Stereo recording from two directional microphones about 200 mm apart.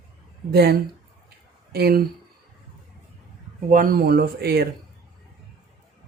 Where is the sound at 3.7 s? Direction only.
45° right (ahead or behind).